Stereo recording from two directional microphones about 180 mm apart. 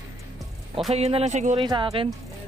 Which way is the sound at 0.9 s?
35° right (ahead or behind).